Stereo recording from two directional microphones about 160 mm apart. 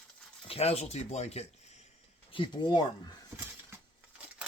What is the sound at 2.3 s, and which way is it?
Speech, 30° left (ahead or behind).